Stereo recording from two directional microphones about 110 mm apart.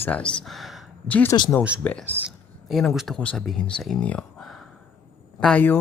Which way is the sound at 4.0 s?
10° left (ahead or behind).